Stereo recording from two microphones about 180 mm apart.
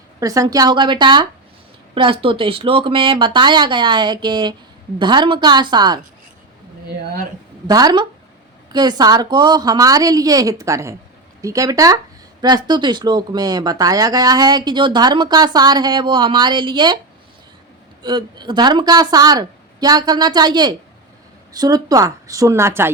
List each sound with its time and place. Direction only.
0.2 s speech: 20° right (ahead or behind)
7.7 s speech: 20° right (ahead or behind)
18.0 s speech: 25° right (ahead or behind)